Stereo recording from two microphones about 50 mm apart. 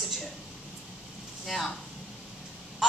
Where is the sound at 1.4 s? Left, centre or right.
Centre.